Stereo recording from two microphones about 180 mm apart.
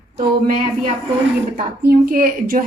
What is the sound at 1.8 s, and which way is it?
Speech, 50° right (ahead or behind).